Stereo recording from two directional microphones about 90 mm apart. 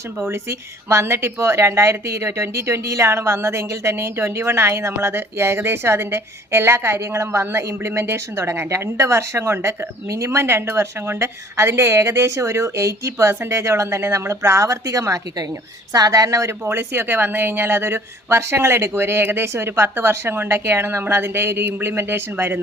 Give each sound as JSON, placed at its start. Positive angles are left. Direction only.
{"t": 0.3, "sound": "speech", "side_deg": -30}